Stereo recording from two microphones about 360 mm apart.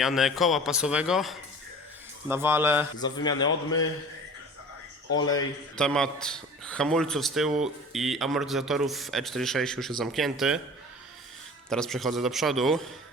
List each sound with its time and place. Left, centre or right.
0.0 s speech: centre
3.4 s a man's voice: left
5.2 s speech: centre
11.7 s speech: centre